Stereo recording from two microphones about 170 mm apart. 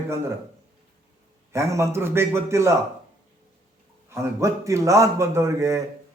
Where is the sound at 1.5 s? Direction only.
15° right (ahead or behind).